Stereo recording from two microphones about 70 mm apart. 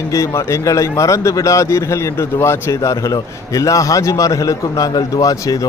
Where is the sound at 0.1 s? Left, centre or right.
Left.